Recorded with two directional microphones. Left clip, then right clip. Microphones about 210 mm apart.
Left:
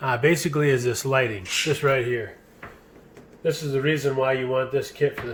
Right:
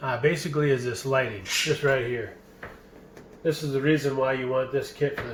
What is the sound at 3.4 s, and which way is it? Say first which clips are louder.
Speech: left 1 dB; 50° left (ahead or behind).